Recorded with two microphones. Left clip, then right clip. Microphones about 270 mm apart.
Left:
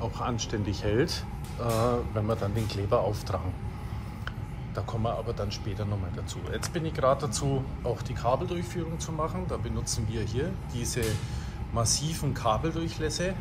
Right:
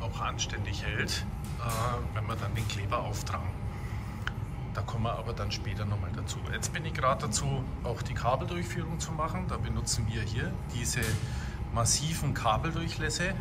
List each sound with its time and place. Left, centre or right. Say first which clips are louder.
0.0 s speech: left 2 dB; centre
4.7 s speech: left 3 dB; centre